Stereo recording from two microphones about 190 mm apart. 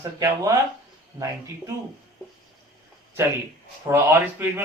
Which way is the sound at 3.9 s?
10° right (ahead or behind).